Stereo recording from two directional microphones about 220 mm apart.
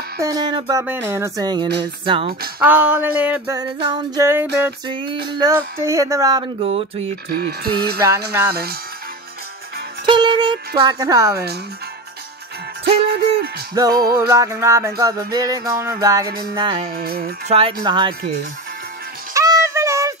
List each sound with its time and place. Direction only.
0.2 s music: 15° right (ahead or behind)
2.7 s music: 5° right (ahead or behind)
3.5 s music: 15° right (ahead or behind)
4.8 s music: 20° right (ahead or behind)
7.2 s speech: 45° right (ahead or behind)
8.0 s music: 10° right (ahead or behind)
10.0 s music: 20° right (ahead or behind)
13.0 s music: 45° right (ahead or behind)
13.7 s music: 15° right (ahead or behind)
16.9 s speech: 45° right (ahead or behind)
17.5 s music: 25° right (ahead or behind)
19.3 s a sound: 15° right (ahead or behind)